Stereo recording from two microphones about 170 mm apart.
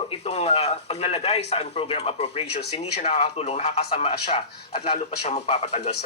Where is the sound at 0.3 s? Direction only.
35° left (ahead or behind).